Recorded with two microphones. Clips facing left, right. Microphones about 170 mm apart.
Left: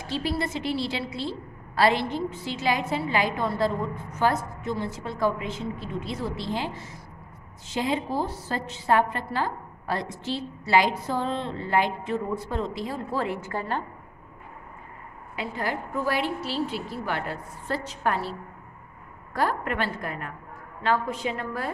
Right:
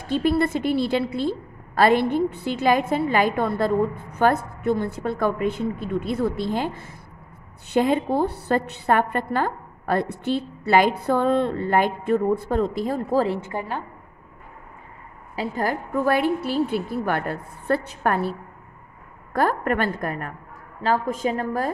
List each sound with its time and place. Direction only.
0.0 s a woman's voice: 55° right (ahead or behind)
13.2 s a woman's voice: 30° right (ahead or behind)
13.5 s a woman's voice: 20° right (ahead or behind)
15.3 s a woman's voice: 45° right (ahead or behind)
19.3 s a woman's voice: 50° right (ahead or behind)